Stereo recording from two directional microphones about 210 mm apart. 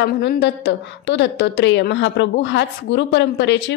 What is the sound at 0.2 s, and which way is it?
A woman's voice, 55° left (ahead or behind).